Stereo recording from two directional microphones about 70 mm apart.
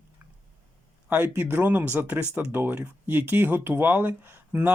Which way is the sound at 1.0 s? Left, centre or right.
Right.